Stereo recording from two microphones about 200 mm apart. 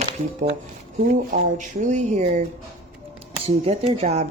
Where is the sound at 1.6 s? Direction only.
40° right (ahead or behind).